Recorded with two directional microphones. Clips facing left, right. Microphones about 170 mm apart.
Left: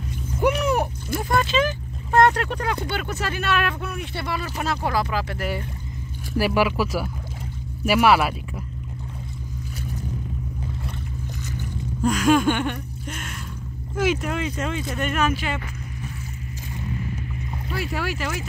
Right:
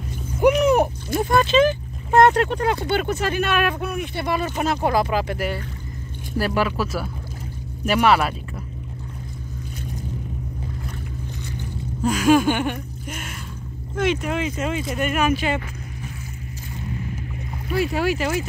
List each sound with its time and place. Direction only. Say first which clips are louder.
0.4 s speech: right 5 dB; 20° right (ahead or behind)
6.3 s speech: left 1 dB; 10° left (ahead or behind)
12.0 s a sound: right 2 dB; 5° right (ahead or behind)
13.9 s speech: right 1 dB; 5° left (ahead or behind)
17.7 s speech: right 7 dB; 20° right (ahead or behind)